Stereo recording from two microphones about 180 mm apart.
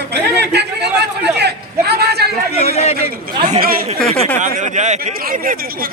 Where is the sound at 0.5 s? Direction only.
70° right (ahead or behind).